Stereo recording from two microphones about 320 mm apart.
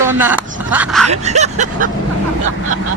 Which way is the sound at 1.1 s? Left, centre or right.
Right.